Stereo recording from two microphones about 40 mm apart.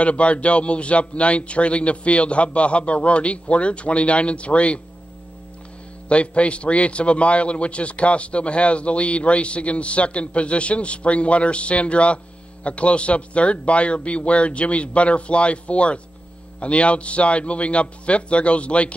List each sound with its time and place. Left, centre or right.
0.0 s a man's voice: left
6.0 s a man's voice: left